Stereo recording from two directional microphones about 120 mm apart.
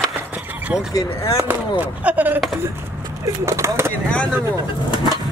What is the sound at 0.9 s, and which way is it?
Speech, 30° left (ahead or behind).